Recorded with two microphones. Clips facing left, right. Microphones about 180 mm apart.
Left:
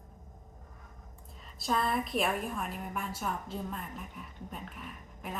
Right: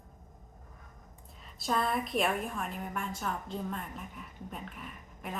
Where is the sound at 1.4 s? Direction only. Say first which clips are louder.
Even; centre (ahead or behind).